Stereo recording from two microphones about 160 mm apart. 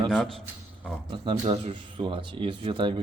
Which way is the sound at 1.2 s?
30° right (ahead or behind).